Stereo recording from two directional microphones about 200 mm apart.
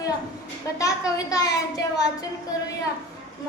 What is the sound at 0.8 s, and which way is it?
A child's voice, 15° left (ahead or behind).